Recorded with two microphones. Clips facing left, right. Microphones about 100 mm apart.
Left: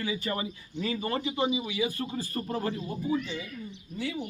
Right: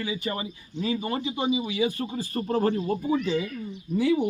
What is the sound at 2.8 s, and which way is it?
Speech, 55° right (ahead or behind).